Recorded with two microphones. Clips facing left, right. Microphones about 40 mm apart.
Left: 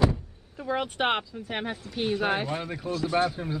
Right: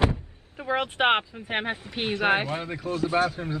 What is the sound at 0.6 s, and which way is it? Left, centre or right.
Speech, right.